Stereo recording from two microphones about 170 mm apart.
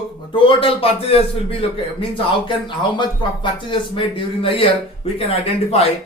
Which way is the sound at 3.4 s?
30° left (ahead or behind).